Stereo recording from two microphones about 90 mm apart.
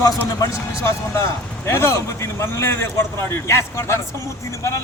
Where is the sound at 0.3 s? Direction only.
40° left (ahead or behind).